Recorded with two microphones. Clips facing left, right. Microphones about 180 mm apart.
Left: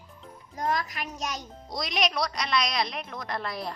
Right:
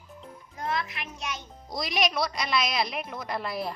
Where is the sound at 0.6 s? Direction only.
40° left (ahead or behind).